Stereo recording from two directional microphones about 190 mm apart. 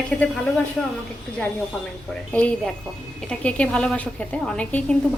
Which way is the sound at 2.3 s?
5° left (ahead or behind).